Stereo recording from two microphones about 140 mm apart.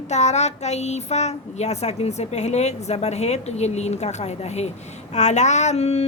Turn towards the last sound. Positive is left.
turn(degrees=50)  # may be behind; listen again after turning